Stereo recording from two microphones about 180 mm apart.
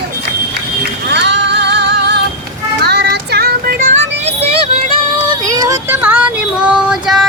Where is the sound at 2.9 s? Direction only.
65° right (ahead or behind).